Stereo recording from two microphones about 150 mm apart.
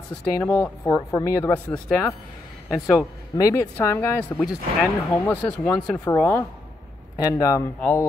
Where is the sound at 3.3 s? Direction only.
20° left (ahead or behind).